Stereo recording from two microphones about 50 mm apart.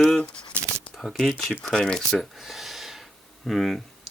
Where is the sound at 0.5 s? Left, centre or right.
Right.